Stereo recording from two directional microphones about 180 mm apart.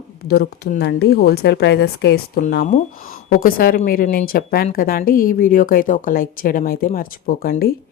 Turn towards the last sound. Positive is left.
turn(degrees=55)  # may be behind; listen again after turning